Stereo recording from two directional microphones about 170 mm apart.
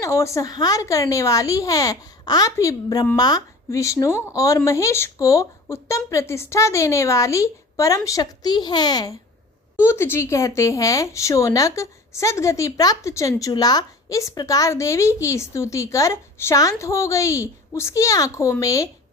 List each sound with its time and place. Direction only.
0.0 s a woman's voice: 15° left (ahead or behind)